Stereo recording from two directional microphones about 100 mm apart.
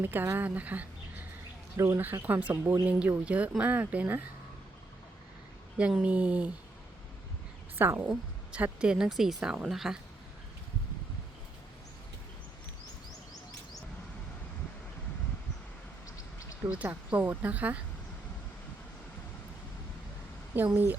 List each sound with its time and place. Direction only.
0.0 s speech: 20° right (ahead or behind)
5.7 s speech: 10° right (ahead or behind)
7.8 s speech: 20° right (ahead or behind); by 10.0 s 5° right (ahead or behind)
16.6 s speech: 15° right (ahead or behind)
20.5 s speech: 20° right (ahead or behind)